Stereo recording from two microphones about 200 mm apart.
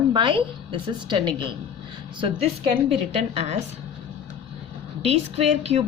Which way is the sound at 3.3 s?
30° right (ahead or behind).